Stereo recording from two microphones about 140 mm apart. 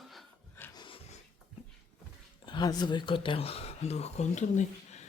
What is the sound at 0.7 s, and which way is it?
Dog, 35° left (ahead or behind).